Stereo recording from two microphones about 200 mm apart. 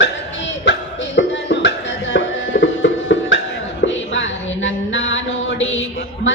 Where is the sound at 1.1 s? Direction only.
60° left (ahead or behind).